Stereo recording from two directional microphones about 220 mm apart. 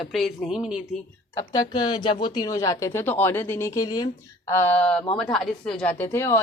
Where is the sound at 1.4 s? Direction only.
20° left (ahead or behind).